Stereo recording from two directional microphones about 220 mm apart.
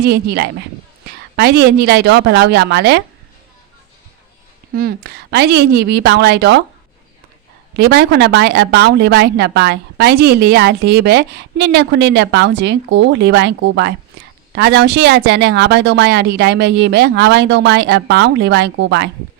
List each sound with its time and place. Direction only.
0.0 s a woman's voice: 45° right (ahead or behind)
4.7 s a woman's voice: 45° right (ahead or behind)
7.8 s a woman's voice: 45° right (ahead or behind)